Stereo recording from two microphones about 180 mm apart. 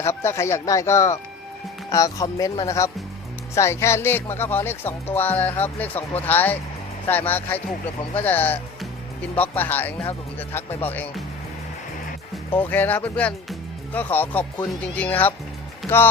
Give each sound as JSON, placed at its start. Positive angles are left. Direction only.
{"t": 0.0, "sound": "speech", "side_deg": 15}
{"t": 12.5, "sound": "speech", "side_deg": 10}